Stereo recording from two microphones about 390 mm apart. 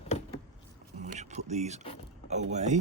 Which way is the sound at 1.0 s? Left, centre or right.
Centre.